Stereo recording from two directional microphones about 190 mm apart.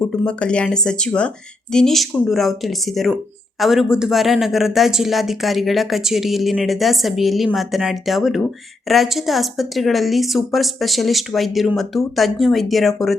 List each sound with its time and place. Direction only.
0.1 s speech: 5° left (ahead or behind)